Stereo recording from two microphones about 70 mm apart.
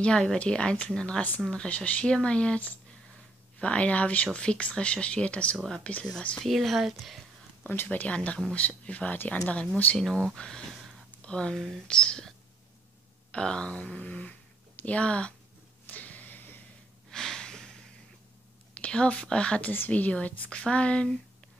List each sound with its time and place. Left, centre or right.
0.0 s speech: centre
6.4 s speech: centre
7.6 s speech: left
9.9 s speech: centre
11.5 s speech: centre
15.9 s a sound: left
17.1 s snort: centre
18.8 s speech: centre
19.7 s speech: left